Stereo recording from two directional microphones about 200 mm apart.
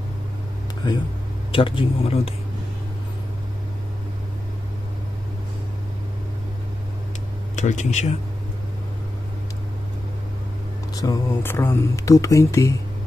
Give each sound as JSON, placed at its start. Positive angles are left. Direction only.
{"t": 1.5, "sound": "speech", "side_deg": 25}
{"t": 7.5, "sound": "speech", "side_deg": 35}
{"t": 11.0, "sound": "speech", "side_deg": 15}